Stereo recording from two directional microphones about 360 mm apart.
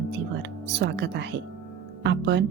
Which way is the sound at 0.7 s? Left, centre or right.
Right.